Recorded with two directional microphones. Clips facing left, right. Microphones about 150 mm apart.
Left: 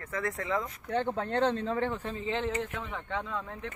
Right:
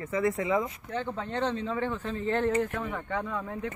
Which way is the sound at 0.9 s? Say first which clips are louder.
Left 3 dB; 60° left (ahead or behind).